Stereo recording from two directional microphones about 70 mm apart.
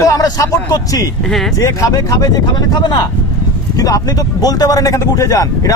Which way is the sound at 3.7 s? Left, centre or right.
Left.